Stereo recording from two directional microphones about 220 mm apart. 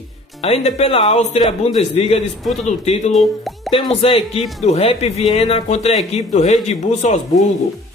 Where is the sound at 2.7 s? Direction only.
30° left (ahead or behind).